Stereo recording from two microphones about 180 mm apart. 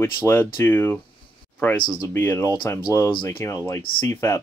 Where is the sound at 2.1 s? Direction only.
10° left (ahead or behind).